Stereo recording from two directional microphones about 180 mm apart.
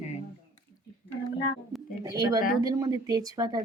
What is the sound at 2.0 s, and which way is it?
A woman's voice, 20° right (ahead or behind).